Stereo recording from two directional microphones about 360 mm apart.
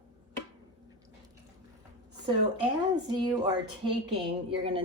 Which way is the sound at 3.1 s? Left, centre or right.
Centre.